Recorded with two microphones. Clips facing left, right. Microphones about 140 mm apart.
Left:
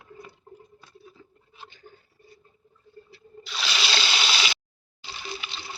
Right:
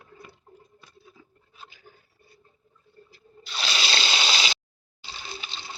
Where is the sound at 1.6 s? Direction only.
5° right (ahead or behind).